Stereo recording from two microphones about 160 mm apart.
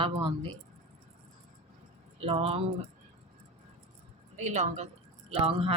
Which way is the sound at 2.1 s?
35° right (ahead or behind).